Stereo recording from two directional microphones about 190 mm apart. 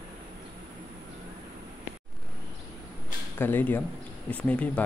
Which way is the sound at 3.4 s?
10° left (ahead or behind).